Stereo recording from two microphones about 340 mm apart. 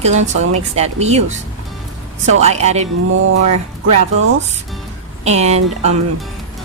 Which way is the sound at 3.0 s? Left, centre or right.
Right.